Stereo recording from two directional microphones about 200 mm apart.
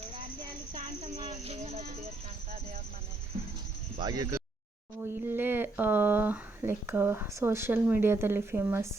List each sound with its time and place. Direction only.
1.3 s speech: 30° right (ahead or behind)
3.9 s speech: 20° right (ahead or behind)